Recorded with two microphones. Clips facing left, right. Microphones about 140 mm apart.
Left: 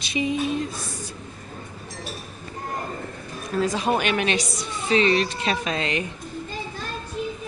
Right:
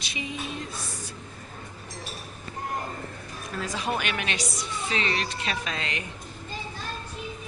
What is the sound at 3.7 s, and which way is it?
Music, 20° left (ahead or behind).